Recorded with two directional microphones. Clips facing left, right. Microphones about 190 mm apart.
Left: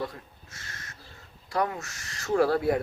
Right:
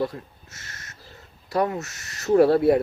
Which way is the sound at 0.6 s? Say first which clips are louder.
Even; 25° right (ahead or behind).